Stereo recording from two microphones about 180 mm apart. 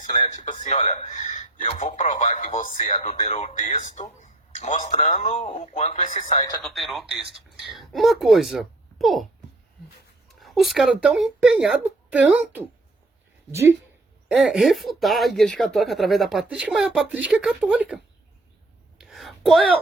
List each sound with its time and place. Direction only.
0.0 s a man's voice: 45° left (ahead or behind)
6.6 s speech: centre (ahead or behind)
10.2 s speech: centre (ahead or behind); by 13.7 s 15° right (ahead or behind)
14.3 s speech: 5° right (ahead or behind)
18.9 s whispering: centre (ahead or behind)